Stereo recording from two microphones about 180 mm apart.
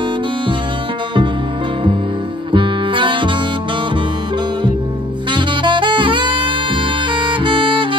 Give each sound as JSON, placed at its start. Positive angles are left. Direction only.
{"t": 2.5, "sound": "music", "side_deg": -30}
{"t": 5.3, "sound": "saxophone", "side_deg": -25}